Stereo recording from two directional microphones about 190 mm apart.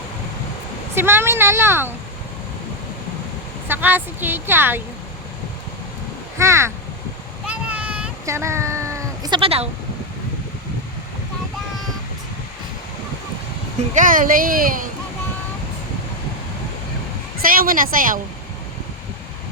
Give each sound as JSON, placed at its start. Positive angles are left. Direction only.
{"t": 0.9, "sound": "speech", "side_deg": -10}
{"t": 3.7, "sound": "speech", "side_deg": -10}
{"t": 6.4, "sound": "speech", "side_deg": -15}
{"t": 7.4, "sound": "a sound", "side_deg": -5}
{"t": 13.9, "sound": "speech", "side_deg": -45}
{"t": 17.4, "sound": "speech", "side_deg": -50}